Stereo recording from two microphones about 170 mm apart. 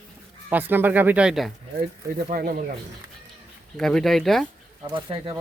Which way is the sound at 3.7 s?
Centre (ahead or behind).